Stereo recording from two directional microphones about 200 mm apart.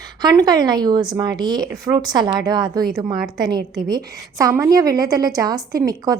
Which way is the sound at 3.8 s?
20° right (ahead or behind).